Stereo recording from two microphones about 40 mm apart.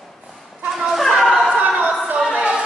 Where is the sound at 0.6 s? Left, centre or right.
Centre.